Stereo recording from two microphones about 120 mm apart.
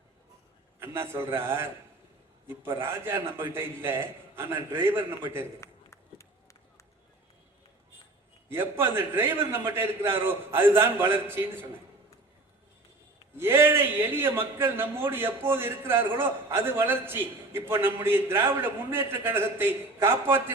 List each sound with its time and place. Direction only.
0.8 s a man's voice: 20° right (ahead or behind)
5.5 s run: 25° left (ahead or behind)
8.4 s a man's voice: 20° right (ahead or behind)
13.3 s a man's voice: 20° right (ahead or behind)